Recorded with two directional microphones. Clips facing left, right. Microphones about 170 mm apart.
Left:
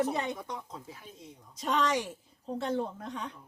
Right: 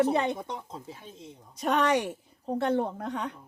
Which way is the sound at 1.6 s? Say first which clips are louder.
Right 4 dB; 60° right (ahead or behind).